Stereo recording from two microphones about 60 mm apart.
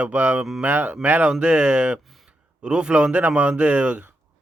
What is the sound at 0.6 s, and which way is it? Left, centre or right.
Speech, right.